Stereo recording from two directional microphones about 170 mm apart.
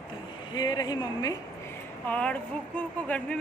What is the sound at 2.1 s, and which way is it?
Speech, 5° left (ahead or behind).